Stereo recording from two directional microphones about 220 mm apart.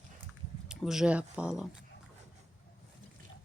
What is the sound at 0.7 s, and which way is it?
Speech, 5° right (ahead or behind).